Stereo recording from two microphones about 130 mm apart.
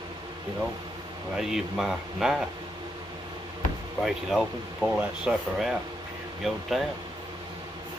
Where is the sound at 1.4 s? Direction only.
5° right (ahead or behind).